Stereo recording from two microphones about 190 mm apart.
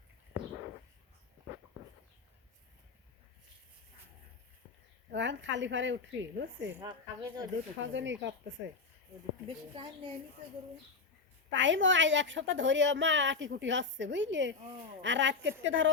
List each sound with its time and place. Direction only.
5.1 s a woman's voice: 70° right (ahead or behind)
6.7 s a woman's voice: 10° right (ahead or behind)
7.8 s a woman's voice: 75° right (ahead or behind)
11.5 s a woman's voice: 80° right